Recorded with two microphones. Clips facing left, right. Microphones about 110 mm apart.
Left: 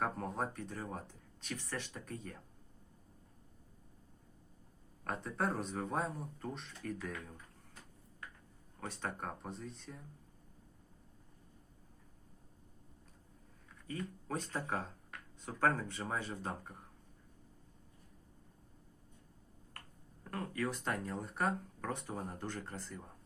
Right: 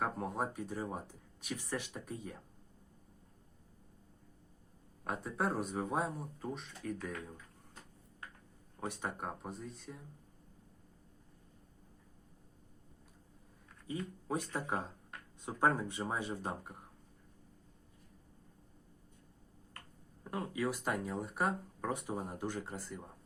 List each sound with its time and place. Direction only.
0.0 s speech: 5° right (ahead or behind)
5.0 s speech: 5° right (ahead or behind)
8.8 s speech: 15° right (ahead or behind)
13.8 s speech: 15° right (ahead or behind)
20.2 s speech: 15° right (ahead or behind)